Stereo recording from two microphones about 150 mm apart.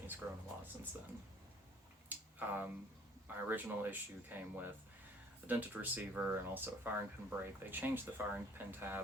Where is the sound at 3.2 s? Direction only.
10° right (ahead or behind).